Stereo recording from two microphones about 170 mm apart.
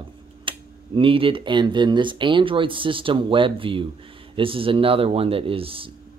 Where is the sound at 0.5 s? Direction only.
30° right (ahead or behind).